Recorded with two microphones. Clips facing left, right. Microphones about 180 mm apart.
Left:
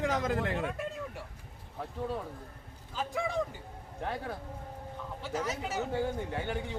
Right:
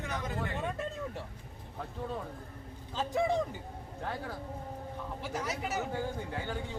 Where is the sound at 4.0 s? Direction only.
20° left (ahead or behind).